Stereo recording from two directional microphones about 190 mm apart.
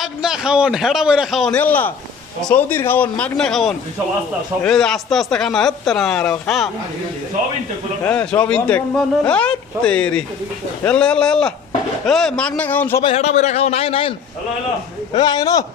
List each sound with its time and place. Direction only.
0.0 s speech: 5° right (ahead or behind)
8.0 s speech: 5° left (ahead or behind)
13.0 s a man's voice: 30° left (ahead or behind)
15.1 s a man's voice: 20° left (ahead or behind)